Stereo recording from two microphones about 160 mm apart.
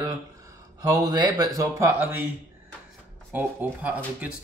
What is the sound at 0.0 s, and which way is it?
Speech, 20° right (ahead or behind).